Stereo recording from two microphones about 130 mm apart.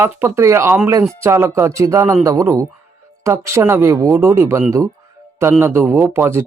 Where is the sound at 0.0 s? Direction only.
20° right (ahead or behind).